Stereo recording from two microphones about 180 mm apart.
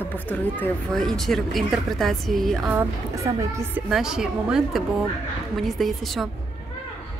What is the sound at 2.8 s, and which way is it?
Speech, 15° right (ahead or behind).